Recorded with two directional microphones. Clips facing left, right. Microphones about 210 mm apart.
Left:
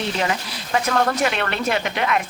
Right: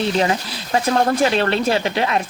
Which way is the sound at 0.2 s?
30° right (ahead or behind).